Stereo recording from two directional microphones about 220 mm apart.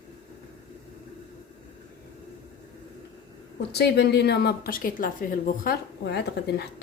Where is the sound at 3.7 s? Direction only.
50° left (ahead or behind).